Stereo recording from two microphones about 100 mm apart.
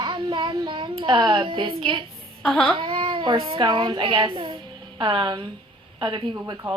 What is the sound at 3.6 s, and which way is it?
A woman's voice, 50° right (ahead or behind).